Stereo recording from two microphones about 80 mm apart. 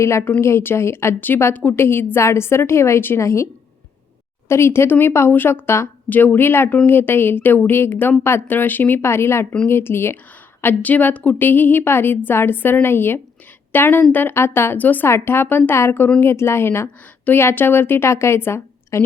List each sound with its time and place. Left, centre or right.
0.0 s a woman's voice: left